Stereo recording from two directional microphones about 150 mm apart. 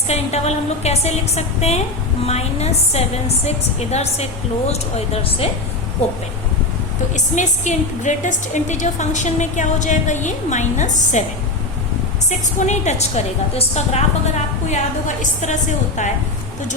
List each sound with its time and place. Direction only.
0.1 s a woman's voice: 45° left (ahead or behind)
7.1 s a woman's voice: 55° left (ahead or behind)
12.5 s a woman's voice: 50° left (ahead or behind)